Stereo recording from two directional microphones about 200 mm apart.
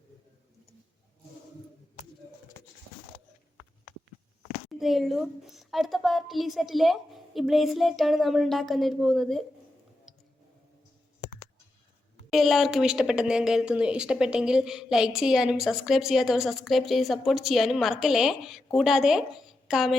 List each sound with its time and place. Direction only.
4.7 s a woman's voice: centre (ahead or behind)
10.1 s clicking: centre (ahead or behind)
12.3 s a woman's voice: centre (ahead or behind)